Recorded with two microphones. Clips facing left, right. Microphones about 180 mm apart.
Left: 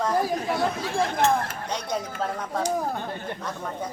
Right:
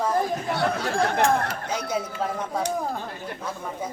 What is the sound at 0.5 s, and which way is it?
Speech, 70° right (ahead or behind).